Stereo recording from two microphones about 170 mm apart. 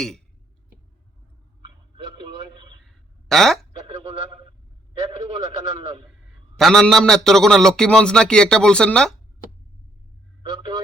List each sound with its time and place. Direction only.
2.8 s a sound: centre (ahead or behind)
3.8 s speech: 35° right (ahead or behind)
6.6 s a man's voice: centre (ahead or behind)